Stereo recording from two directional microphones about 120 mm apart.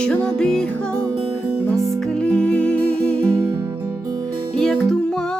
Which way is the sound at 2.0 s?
5° left (ahead or behind).